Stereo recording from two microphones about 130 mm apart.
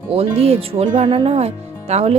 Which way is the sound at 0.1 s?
50° right (ahead or behind).